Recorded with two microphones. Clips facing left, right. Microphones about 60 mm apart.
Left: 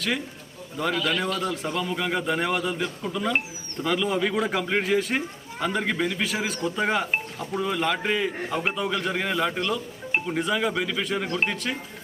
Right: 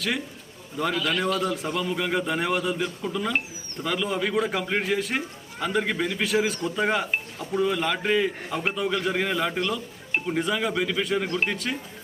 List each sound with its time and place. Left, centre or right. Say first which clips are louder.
0.8 s speech: even; centre